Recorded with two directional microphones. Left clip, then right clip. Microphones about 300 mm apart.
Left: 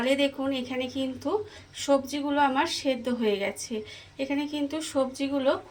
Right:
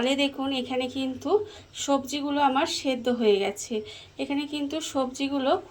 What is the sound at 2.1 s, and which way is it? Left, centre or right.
Speech, centre.